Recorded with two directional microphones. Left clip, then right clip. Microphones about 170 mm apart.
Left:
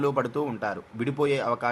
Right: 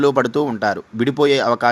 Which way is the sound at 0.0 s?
30° right (ahead or behind).